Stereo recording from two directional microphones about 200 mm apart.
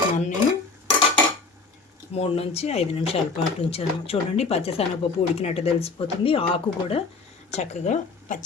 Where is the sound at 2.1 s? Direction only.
30° left (ahead or behind).